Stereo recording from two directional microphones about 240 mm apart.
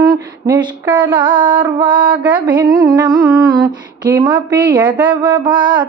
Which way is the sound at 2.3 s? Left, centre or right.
Centre.